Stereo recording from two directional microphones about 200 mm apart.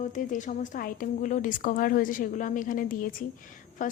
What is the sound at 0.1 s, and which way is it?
A woman's voice, 40° left (ahead or behind).